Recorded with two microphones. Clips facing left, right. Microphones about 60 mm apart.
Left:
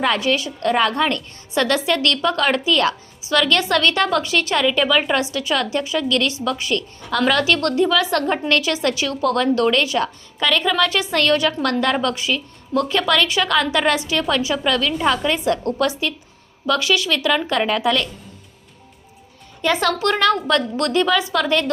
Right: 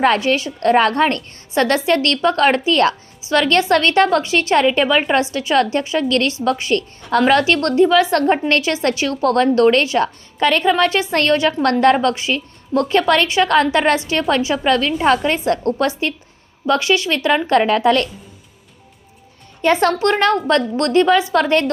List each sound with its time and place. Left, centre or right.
0.2 s a woman's voice: right
0.7 s a woman's voice: right
1.5 s a woman's voice: right
19.6 s a woman's voice: right